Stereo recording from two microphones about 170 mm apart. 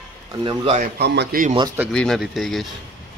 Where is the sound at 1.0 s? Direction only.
85° right.